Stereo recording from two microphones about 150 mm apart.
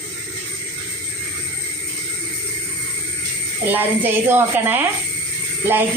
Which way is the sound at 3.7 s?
15° right (ahead or behind).